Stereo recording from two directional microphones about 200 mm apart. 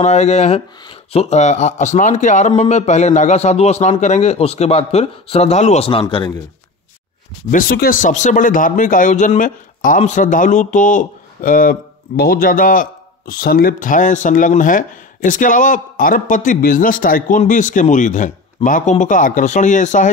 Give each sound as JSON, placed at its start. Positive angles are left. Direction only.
{"t": 0.0, "sound": "speech", "side_deg": 35}
{"t": 7.5, "sound": "speech", "side_deg": 45}